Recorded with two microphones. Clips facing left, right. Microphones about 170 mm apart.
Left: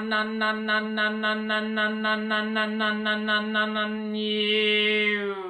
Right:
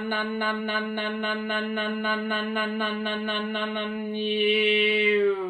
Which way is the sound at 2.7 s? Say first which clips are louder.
Left 1 dB; 5° right (ahead or behind).